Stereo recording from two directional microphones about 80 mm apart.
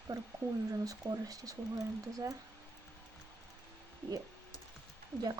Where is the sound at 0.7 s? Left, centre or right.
Right.